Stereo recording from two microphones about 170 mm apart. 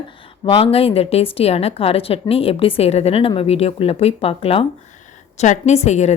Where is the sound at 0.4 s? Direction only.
35° left (ahead or behind).